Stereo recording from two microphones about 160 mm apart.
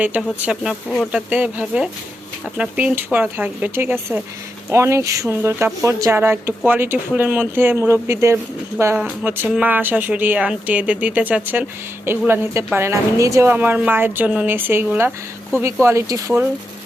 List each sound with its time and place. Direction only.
0.0 s a woman's voice: 10° right (ahead or behind)